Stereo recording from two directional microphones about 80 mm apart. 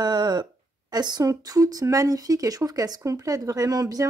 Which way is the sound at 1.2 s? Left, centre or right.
Right.